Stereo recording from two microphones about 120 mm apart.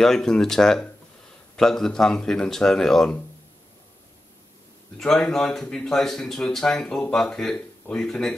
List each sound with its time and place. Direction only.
0.0 s speech: 5° left (ahead or behind)
4.9 s speech: 5° left (ahead or behind)